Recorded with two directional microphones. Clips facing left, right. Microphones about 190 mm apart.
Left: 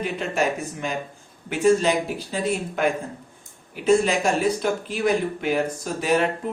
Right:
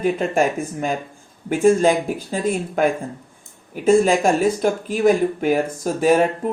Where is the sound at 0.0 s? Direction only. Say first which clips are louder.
Right 6 dB; 50° right (ahead or behind).